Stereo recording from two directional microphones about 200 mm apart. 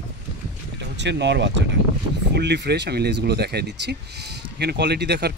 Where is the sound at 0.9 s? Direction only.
60° right (ahead or behind).